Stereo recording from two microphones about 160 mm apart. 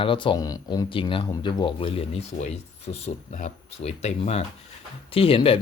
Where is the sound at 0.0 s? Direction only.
30° left (ahead or behind).